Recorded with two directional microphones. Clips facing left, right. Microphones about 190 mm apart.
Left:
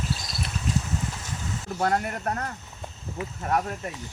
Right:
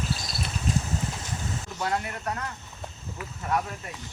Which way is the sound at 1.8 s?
50° left (ahead or behind).